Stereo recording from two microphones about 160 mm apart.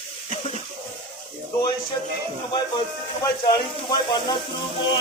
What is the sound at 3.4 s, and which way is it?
Speech, 25° left (ahead or behind).